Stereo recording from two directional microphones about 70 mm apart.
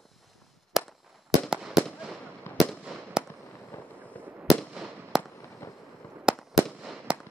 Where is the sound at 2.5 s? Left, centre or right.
Left.